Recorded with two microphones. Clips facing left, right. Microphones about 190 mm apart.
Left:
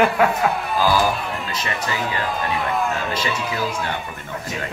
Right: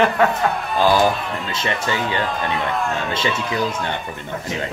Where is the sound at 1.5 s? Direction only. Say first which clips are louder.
Right 6 dB; 25° right (ahead or behind).